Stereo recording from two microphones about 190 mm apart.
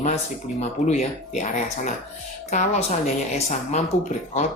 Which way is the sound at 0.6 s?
35° left (ahead or behind).